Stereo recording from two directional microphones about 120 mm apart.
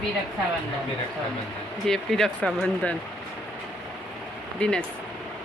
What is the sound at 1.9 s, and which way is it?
Speech, 5° left (ahead or behind).